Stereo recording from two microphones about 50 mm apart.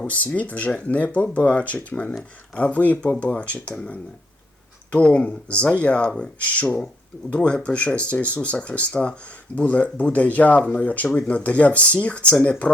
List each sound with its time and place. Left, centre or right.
0.1 s speech: left
5.0 s speech: left